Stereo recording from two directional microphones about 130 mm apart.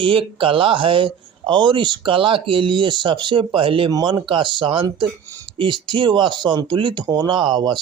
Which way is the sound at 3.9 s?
30° right (ahead or behind).